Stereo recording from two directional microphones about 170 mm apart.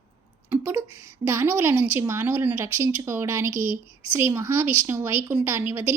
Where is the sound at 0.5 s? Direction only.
15° right (ahead or behind).